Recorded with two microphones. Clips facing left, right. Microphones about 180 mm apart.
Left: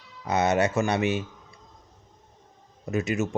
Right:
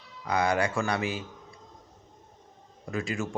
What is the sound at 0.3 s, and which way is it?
Speech, 25° left (ahead or behind).